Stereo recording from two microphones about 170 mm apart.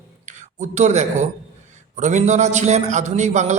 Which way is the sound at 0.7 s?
45° right (ahead or behind).